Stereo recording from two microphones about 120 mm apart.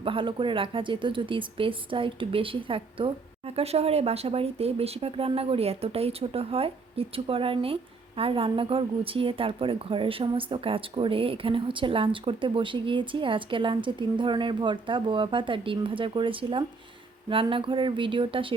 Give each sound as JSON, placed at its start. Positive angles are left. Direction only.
{"t": 0.0, "sound": "speech", "side_deg": -45}